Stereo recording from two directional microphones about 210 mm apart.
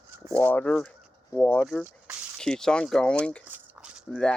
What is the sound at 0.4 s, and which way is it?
Speech, 10° left (ahead or behind).